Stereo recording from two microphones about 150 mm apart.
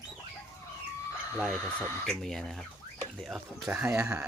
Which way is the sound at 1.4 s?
5° left (ahead or behind).